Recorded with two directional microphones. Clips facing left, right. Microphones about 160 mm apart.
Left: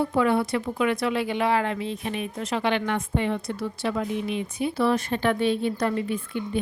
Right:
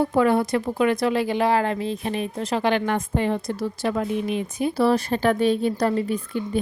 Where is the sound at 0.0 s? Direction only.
40° right (ahead or behind).